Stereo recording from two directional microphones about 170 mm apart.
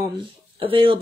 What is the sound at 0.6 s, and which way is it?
Speech, 30° right (ahead or behind).